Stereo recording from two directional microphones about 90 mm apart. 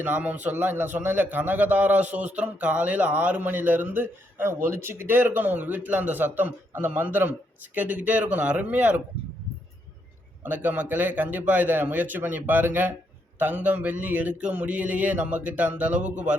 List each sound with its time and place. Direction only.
0.0 s a man's voice: 20° right (ahead or behind)
10.4 s a man's voice: 20° right (ahead or behind)